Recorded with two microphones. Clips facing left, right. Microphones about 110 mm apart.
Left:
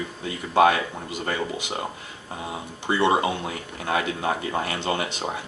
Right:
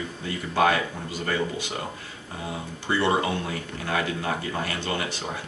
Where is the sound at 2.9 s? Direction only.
20° left (ahead or behind).